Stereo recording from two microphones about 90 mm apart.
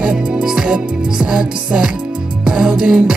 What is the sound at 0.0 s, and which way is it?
Music, 5° right (ahead or behind).